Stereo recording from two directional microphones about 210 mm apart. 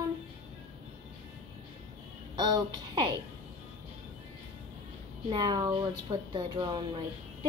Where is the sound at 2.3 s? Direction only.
20° right (ahead or behind).